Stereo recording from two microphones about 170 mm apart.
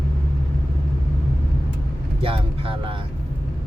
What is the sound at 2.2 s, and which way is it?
Speech, 35° right (ahead or behind).